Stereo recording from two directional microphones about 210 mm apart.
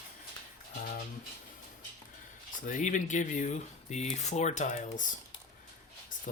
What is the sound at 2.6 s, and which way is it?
Speech, 40° left (ahead or behind).